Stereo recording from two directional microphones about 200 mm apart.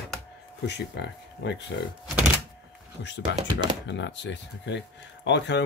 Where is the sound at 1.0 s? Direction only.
60° left (ahead or behind).